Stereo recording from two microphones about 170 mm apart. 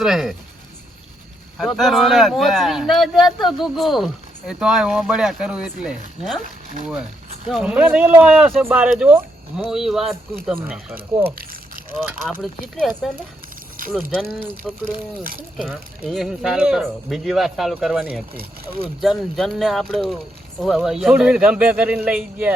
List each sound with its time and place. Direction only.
0.0 s speech: centre (ahead or behind)
1.5 s speech: centre (ahead or behind)
7.4 s speech: 5° right (ahead or behind)
13.0 s speech: centre (ahead or behind)
13.8 s a sound: 55° right (ahead or behind)
15.6 s speech: centre (ahead or behind)